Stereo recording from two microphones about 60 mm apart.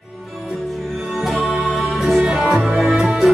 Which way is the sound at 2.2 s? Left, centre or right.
Centre.